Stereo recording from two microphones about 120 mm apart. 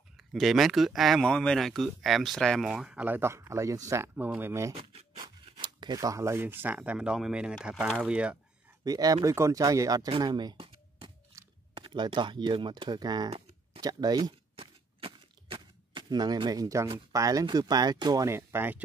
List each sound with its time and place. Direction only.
0.2 s speech: centre (ahead or behind)
2.7 s speech: 10° right (ahead or behind)
5.1 s speech: 40° right (ahead or behind); by 8.4 s 10° right (ahead or behind)
8.8 s speech: 30° right (ahead or behind)
10.2 s a sound: 35° right (ahead or behind)
11.3 s chewing: 25° right (ahead or behind)
11.7 s speech: 40° right (ahead or behind)
14.6 s shuffling cards: 50° right (ahead or behind); by 16.9 s 25° right (ahead or behind)
17.1 s speech: 30° right (ahead or behind)